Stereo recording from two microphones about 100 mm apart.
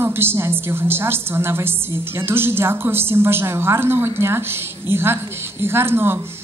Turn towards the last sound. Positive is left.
turn(degrees=-25)  # may be behind; listen again after turning